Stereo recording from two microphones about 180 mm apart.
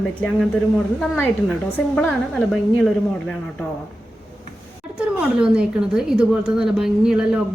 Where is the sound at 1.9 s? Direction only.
10° left (ahead or behind).